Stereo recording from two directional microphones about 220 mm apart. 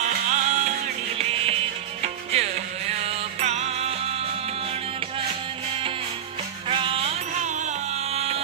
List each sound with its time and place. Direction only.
0.0 s music: 30° right (ahead or behind)
6.7 s music: 25° right (ahead or behind)